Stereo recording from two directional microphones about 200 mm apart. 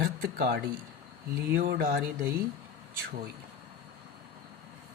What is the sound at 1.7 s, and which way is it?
Speech, 50° right (ahead or behind).